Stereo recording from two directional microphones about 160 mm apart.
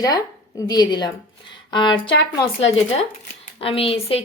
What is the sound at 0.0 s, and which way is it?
A woman's voice, 25° left (ahead or behind).